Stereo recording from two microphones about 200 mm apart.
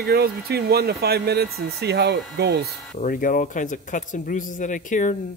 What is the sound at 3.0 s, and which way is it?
Speech, 40° left (ahead or behind).